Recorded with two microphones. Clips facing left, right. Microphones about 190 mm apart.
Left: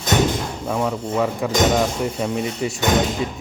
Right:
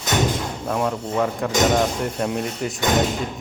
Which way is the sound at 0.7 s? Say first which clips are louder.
Left 1 dB; centre (ahead or behind).